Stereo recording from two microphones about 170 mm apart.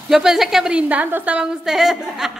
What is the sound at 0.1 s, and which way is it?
A woman's voice, centre (ahead or behind).